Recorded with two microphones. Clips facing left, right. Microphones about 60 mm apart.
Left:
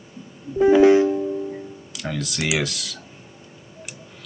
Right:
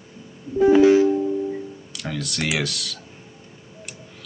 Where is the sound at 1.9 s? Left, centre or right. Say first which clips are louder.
Left 1 dB; centre.